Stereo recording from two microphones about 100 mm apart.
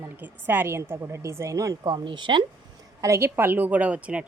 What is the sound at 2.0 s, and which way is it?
Speech, 50° right (ahead or behind).